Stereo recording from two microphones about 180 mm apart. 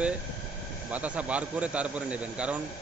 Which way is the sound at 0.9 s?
10° right (ahead or behind).